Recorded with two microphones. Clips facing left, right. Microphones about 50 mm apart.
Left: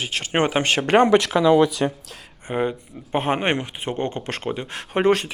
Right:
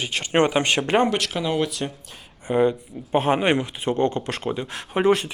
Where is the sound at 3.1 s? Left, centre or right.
Left.